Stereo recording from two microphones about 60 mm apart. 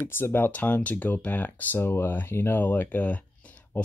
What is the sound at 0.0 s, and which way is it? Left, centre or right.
Speech, left.